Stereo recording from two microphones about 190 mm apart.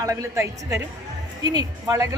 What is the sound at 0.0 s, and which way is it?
A man's voice, 15° right (ahead or behind).